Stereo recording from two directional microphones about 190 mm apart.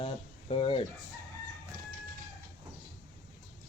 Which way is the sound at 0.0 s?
30° left (ahead or behind).